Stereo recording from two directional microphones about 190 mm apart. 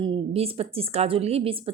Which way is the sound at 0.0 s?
30° right (ahead or behind).